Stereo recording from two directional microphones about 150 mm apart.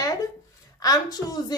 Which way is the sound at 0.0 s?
25° left (ahead or behind).